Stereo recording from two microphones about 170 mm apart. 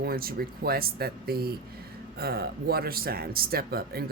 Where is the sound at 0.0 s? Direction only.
60° right (ahead or behind).